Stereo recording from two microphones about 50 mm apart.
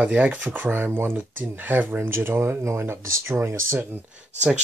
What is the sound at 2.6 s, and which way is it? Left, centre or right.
Speech, right.